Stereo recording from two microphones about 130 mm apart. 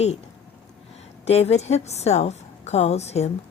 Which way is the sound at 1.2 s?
55° left (ahead or behind).